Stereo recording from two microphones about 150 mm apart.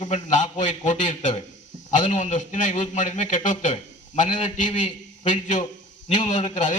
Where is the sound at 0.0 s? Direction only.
50° left (ahead or behind).